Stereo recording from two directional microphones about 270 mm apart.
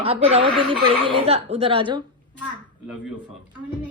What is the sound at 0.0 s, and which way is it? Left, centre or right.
Speech, right.